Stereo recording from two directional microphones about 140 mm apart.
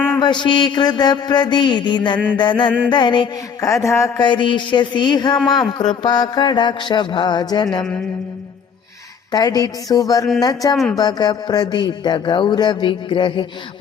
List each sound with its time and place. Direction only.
0.2 s speech: 35° left (ahead or behind)
4.2 s speech: 35° left (ahead or behind)
9.3 s speech: 25° left (ahead or behind)